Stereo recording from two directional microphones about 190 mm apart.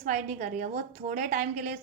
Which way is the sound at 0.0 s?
40° right (ahead or behind).